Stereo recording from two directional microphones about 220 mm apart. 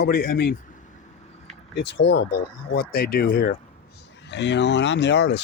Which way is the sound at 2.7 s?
45° left (ahead or behind).